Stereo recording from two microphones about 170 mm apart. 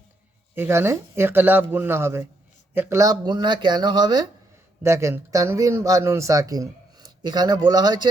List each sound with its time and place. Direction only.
0.5 s speech: 15° right (ahead or behind)